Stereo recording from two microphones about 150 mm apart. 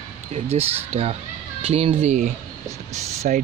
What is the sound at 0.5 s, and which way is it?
Speech, 50° right (ahead or behind).